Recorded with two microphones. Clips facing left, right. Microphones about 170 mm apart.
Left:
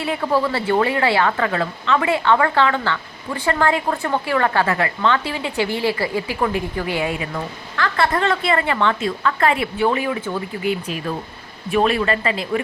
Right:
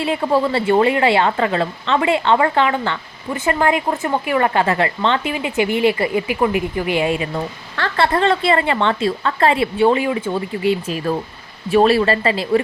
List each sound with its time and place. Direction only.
0.0 s a woman's voice: 25° right (ahead or behind)